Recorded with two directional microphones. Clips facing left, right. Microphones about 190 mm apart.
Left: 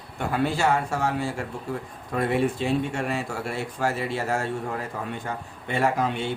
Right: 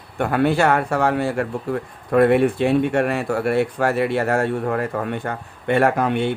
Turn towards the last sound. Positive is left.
turn(degrees=-60)  # may be behind; listen again after turning